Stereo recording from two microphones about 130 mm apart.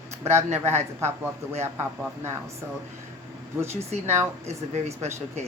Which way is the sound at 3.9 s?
60° right (ahead or behind).